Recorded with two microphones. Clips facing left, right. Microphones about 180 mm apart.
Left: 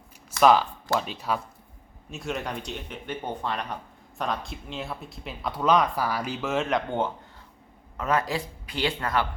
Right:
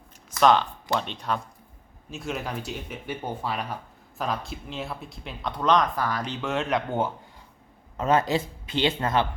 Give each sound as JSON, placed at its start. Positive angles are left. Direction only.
{"t": 0.3, "sound": "speech", "side_deg": 5}
{"t": 7.9, "sound": "speech", "side_deg": -25}